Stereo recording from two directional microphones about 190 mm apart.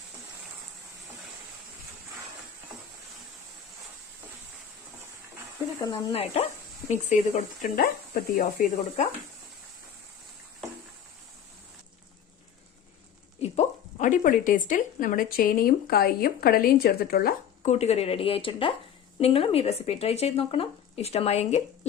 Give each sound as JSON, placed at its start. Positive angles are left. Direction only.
{"t": 5.8, "sound": "speech", "side_deg": 25}
{"t": 6.9, "sound": "speech", "side_deg": 40}
{"t": 13.4, "sound": "speech", "side_deg": 40}
{"t": 17.6, "sound": "speech", "side_deg": 35}